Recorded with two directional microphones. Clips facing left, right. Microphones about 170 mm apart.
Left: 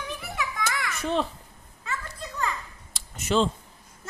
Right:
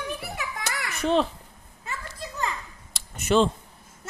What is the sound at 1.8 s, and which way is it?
Children playing, 25° right (ahead or behind).